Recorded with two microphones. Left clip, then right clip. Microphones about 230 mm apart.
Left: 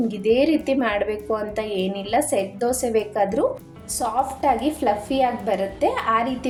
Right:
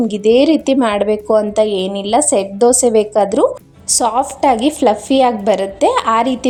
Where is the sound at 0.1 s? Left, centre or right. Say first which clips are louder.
Right 8 dB; right.